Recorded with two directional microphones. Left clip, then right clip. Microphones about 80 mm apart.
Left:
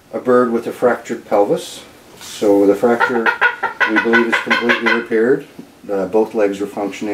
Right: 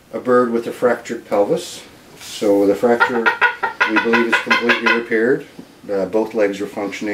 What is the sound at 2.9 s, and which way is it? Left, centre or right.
Chicken, centre.